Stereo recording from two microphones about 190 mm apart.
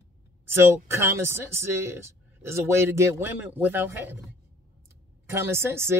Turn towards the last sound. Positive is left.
turn(degrees=-10)  # may be behind; listen again after turning